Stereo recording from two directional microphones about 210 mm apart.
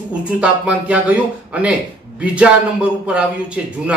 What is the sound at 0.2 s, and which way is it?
Speech, 5° right (ahead or behind).